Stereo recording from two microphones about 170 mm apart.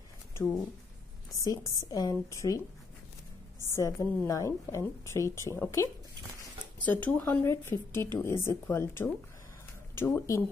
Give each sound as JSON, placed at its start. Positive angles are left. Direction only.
{"t": 1.3, "sound": "a woman's voice", "side_deg": 20}
{"t": 6.9, "sound": "speech", "side_deg": 10}